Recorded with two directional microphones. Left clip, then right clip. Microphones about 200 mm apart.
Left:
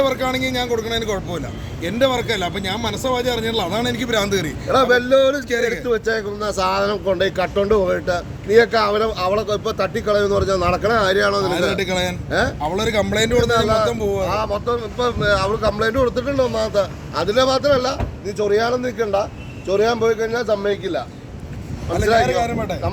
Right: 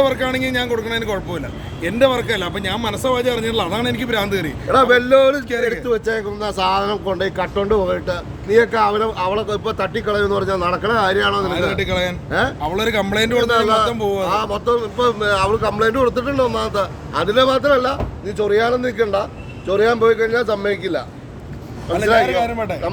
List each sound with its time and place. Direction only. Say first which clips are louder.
0.0 s speech: right 2 dB; 5° left (ahead or behind)
4.7 s speech: right 2 dB; 15° right (ahead or behind); by 11.5 s centre (ahead or behind)
11.8 s a man's voice: right 1 dB; 25° left (ahead or behind)
12.3 s speech: even; 5° right (ahead or behind)
12.6 s speech: right 1 dB; 10° left (ahead or behind)
14.0 s speech: right 1 dB; 10° right (ahead or behind)
14.7 s speech: right 4 dB; 30° right (ahead or behind)
22.0 s a man's voice: right 2 dB; 25° right (ahead or behind)
22.3 s speech: right 1 dB; 5° right (ahead or behind)